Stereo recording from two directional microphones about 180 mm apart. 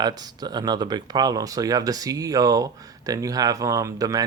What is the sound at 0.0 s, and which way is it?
Speech, 20° right (ahead or behind).